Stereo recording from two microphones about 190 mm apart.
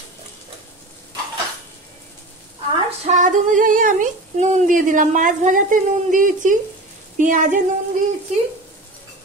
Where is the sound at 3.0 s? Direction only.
40° right (ahead or behind).